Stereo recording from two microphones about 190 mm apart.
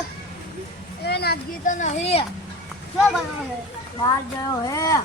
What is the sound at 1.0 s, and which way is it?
Speech, 55° left (ahead or behind).